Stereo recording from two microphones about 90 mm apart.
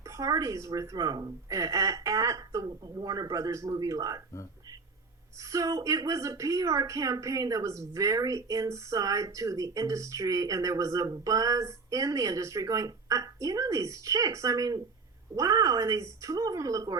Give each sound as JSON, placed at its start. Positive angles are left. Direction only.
{"t": 0.1, "sound": "a woman's voice", "side_deg": -40}
{"t": 5.5, "sound": "a woman's voice", "side_deg": -35}